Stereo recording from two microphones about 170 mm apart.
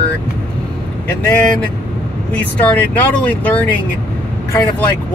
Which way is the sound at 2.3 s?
10° left (ahead or behind).